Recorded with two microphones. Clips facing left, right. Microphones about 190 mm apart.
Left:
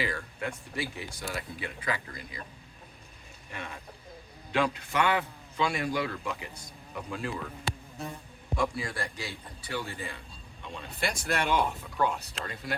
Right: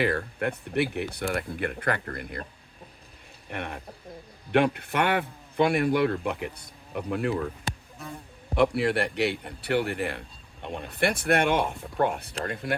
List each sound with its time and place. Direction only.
0.0 s a man's voice: 60° right (ahead or behind)
3.5 s a man's voice: 65° right (ahead or behind)
8.5 s a man's voice: 65° right (ahead or behind)